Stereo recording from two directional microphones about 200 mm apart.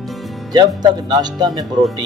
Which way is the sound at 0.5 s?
20° right (ahead or behind).